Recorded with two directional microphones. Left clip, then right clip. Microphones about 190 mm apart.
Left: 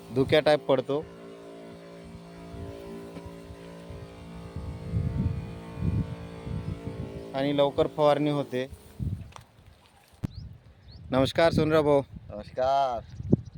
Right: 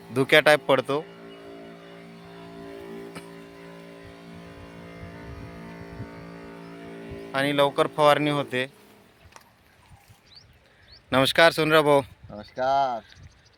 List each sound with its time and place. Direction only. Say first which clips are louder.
0.1 s speech: right 4 dB; centre (ahead or behind)
1.1 s vehicle: right 1 dB; 50° left (ahead or behind)
5.5 s music: left 2 dB; 50° left (ahead or behind)
7.3 s speech: right 3 dB; 5° left (ahead or behind)
11.1 s speech: right 5 dB; 10° left (ahead or behind)
12.4 s speech: right 2 dB; 30° left (ahead or behind)